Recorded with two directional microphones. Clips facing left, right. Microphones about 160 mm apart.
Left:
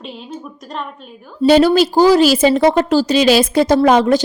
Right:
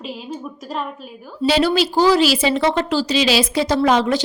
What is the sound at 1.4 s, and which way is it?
Speech, 45° left (ahead or behind).